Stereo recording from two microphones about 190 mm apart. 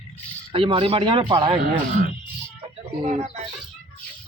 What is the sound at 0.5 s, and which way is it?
Speech, 30° right (ahead or behind).